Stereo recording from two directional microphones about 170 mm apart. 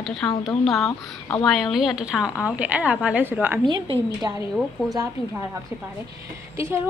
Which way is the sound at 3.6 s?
25° right (ahead or behind).